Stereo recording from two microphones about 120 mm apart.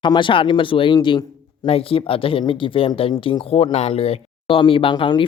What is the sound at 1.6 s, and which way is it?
Speech, 50° left (ahead or behind).